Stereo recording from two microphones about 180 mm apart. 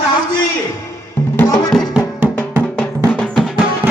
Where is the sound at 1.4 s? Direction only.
20° left (ahead or behind).